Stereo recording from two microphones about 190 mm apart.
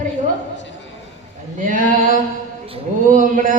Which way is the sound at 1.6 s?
45° right (ahead or behind).